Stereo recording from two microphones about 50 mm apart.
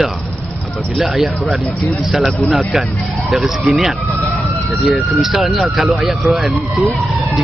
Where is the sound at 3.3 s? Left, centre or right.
Centre.